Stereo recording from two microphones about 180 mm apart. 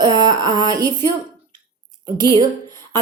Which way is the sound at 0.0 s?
25° right (ahead or behind).